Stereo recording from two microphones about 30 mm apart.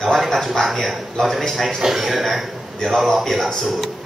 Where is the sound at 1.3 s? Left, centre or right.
Centre.